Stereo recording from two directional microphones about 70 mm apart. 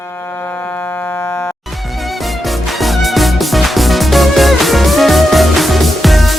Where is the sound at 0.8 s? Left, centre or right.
Left.